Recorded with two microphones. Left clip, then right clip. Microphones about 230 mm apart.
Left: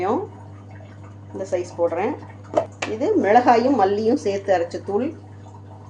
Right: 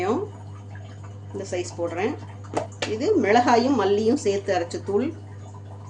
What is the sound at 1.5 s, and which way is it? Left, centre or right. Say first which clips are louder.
A woman's voice: left 6 dB; right.